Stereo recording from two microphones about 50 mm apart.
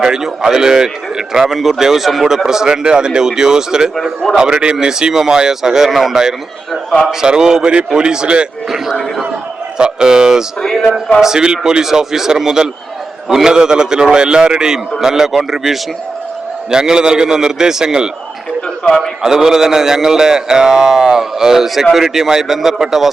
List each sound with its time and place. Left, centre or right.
0.0 s a man's voice: centre
9.7 s a man's voice: centre
11.2 s a man's voice: centre
19.2 s a man's voice: centre